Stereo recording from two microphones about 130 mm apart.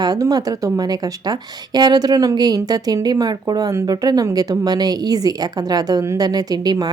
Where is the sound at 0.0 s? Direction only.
30° right (ahead or behind).